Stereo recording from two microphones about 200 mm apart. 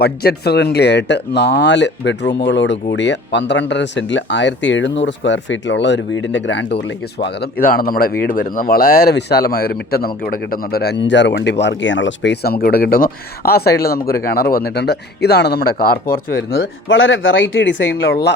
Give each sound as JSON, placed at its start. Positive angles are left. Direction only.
{"t": 0.0, "sound": "speech", "side_deg": 50}
{"t": 18.1, "sound": "speech", "side_deg": 55}